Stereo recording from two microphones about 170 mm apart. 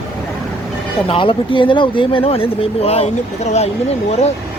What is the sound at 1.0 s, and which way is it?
Speech, 30° left (ahead or behind).